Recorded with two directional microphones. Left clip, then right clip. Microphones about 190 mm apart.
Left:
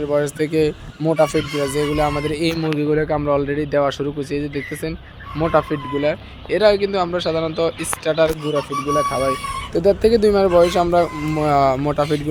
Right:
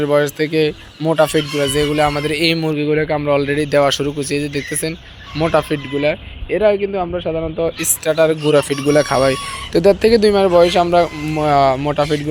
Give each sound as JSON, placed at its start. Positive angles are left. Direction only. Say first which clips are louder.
{"t": 0.0, "sound": "speech", "louder": "right 4 dB", "side_deg": 0}
{"t": 3.0, "sound": "speech", "louder": "right 3 dB", "side_deg": -10}
{"t": 7.8, "sound": "speech", "louder": "right 5 dB", "side_deg": -10}
{"t": 8.5, "sound": "speech", "louder": "right 6 dB", "side_deg": -25}
{"t": 9.7, "sound": "speech", "louder": "right 4 dB", "side_deg": -10}